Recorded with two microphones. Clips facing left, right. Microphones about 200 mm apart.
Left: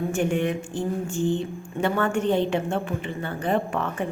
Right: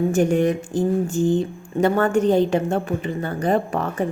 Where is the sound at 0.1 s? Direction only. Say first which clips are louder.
Right 6 dB; 40° right (ahead or behind).